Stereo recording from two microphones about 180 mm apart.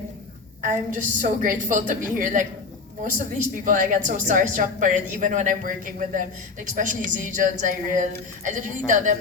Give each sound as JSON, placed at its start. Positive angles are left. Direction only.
{"t": 0.6, "sound": "a woman's voice", "side_deg": -45}